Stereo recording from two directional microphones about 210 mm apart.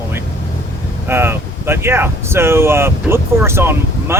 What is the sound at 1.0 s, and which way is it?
Speech, 10° right (ahead or behind).